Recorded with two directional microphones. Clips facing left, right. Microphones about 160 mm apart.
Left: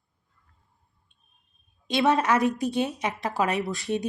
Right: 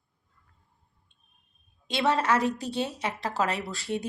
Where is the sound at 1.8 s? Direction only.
15° left (ahead or behind).